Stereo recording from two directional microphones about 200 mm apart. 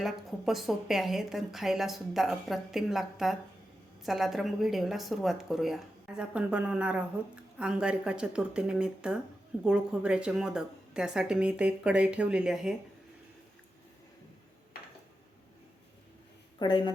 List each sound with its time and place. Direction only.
0.0 s a woman's voice: centre (ahead or behind)
16.6 s speech: 25° left (ahead or behind)